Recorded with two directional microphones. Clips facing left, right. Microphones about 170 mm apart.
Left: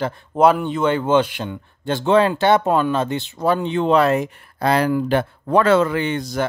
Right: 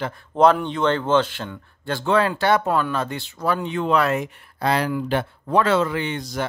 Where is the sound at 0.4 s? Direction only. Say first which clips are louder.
Left 1 dB; 5° left (ahead or behind); by 4.3 s 30° left (ahead or behind).